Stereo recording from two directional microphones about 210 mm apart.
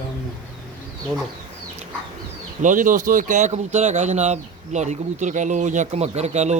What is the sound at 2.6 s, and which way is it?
Speech, 40° right (ahead or behind).